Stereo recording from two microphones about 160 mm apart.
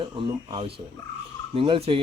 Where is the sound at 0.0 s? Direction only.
30° right (ahead or behind).